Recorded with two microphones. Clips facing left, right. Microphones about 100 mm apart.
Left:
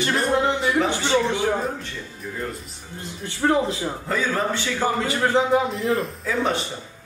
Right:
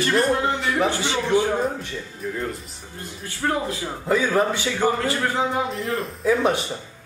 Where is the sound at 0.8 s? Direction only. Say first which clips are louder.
Left 2 dB; 20° left (ahead or behind).